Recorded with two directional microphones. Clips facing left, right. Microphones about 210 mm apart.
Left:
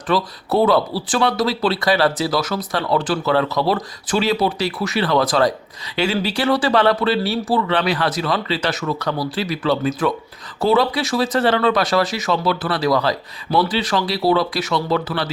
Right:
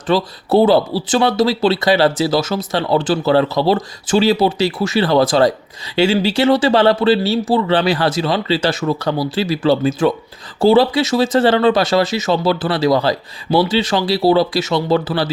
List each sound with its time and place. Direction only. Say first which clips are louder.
0.1 s speech: right 4 dB; 25° right (ahead or behind)